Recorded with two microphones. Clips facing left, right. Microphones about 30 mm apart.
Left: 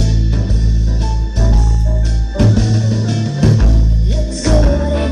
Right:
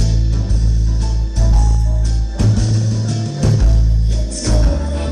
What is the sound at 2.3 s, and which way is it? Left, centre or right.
Music, left.